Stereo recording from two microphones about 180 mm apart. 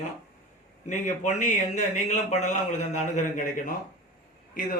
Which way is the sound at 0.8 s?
45° left (ahead or behind).